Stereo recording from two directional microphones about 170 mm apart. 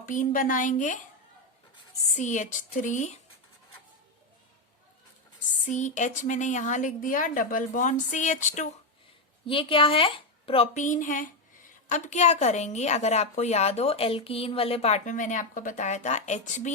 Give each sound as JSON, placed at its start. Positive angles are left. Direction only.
{"t": 0.0, "sound": "a woman's voice", "side_deg": 50}
{"t": 2.1, "sound": "a woman's voice", "side_deg": 45}
{"t": 5.6, "sound": "a woman's voice", "side_deg": 45}
{"t": 9.5, "sound": "a woman's voice", "side_deg": 30}
{"t": 10.8, "sound": "a woman's voice", "side_deg": 45}